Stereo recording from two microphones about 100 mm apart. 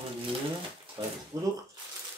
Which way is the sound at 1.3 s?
35° right (ahead or behind).